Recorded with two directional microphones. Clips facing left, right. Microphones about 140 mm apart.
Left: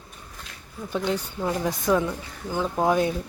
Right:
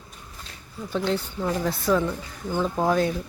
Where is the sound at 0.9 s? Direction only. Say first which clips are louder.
Right 1 dB; 10° left (ahead or behind).